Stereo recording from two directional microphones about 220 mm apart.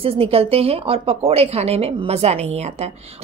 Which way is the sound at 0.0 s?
25° right (ahead or behind).